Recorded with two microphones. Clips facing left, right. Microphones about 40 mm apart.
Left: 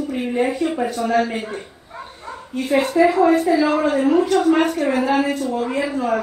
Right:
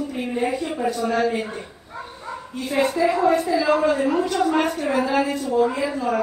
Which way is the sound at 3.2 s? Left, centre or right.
Left.